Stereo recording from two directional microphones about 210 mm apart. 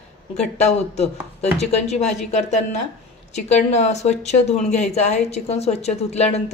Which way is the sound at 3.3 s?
30° left (ahead or behind).